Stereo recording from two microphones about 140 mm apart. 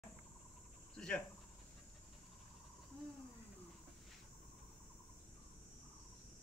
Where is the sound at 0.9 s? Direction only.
5° left (ahead or behind).